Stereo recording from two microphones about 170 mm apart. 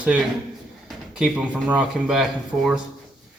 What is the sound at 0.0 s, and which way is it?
Speech, 10° right (ahead or behind).